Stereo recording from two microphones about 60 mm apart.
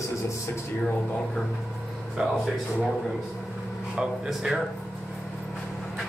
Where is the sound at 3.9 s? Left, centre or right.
Centre.